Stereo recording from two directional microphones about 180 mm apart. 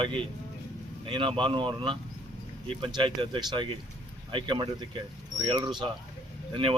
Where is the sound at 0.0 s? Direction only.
30° right (ahead or behind).